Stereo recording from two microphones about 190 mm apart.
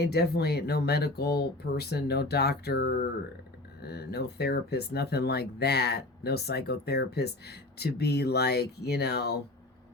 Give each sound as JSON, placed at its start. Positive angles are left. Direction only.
{"t": 0.0, "sound": "speech", "side_deg": 60}